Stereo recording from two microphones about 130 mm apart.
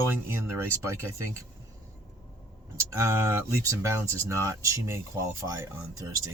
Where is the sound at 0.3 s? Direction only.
20° right (ahead or behind).